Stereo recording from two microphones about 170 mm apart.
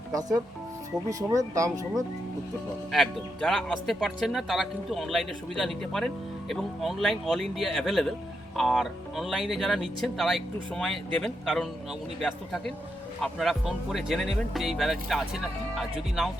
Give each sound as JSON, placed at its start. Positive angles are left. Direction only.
{"t": 0.1, "sound": "speech", "side_deg": -20}
{"t": 2.9, "sound": "speech", "side_deg": 0}